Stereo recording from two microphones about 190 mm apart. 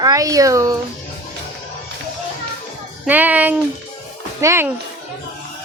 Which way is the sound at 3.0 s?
10° right (ahead or behind).